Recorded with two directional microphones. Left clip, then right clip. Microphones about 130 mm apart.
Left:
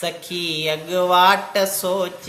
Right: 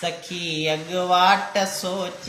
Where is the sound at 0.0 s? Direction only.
35° left (ahead or behind).